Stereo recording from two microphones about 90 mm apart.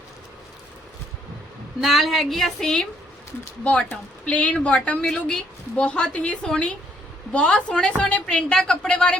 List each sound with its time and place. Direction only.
1.8 s a woman's voice: centre (ahead or behind)